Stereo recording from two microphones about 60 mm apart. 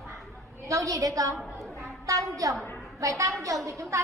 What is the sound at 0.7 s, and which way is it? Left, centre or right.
Speech, right.